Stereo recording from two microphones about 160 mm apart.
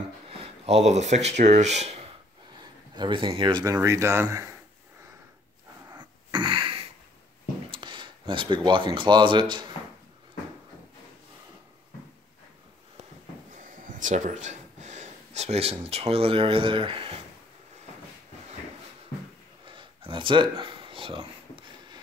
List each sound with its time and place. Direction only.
0.3 s speech: 40° right (ahead or behind)
3.0 s speech: 30° right (ahead or behind)
5.9 s a sound: 30° right (ahead or behind)
7.7 s speech: 30° right (ahead or behind)
13.6 s speech: 55° right (ahead or behind); by 17.2 s 35° right (ahead or behind)
19.6 s a sound: 30° right (ahead or behind)